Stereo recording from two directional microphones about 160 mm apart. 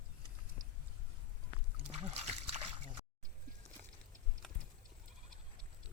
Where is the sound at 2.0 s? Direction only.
40° right (ahead or behind).